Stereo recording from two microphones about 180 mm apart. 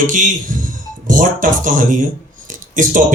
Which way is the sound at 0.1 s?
45° right (ahead or behind).